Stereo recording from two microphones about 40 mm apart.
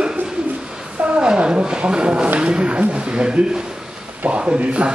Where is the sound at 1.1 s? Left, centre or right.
Right.